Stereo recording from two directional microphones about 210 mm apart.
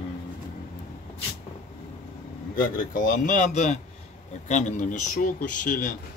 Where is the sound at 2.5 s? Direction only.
40° left (ahead or behind).